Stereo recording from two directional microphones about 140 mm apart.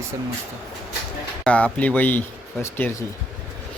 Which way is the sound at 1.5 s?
10° left (ahead or behind).